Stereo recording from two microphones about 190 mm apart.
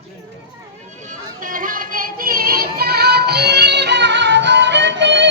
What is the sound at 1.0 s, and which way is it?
Music, 45° right (ahead or behind).